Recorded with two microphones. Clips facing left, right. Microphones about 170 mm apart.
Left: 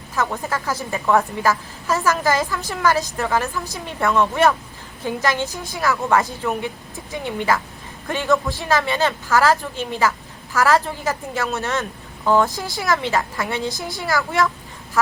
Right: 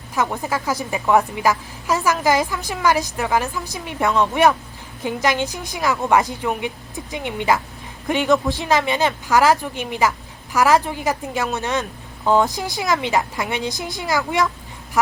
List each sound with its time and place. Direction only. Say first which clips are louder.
0.2 s speech: right 1 dB; 15° right (ahead or behind)